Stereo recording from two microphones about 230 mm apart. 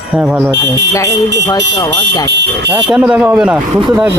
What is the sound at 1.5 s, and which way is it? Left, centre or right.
Speech, centre.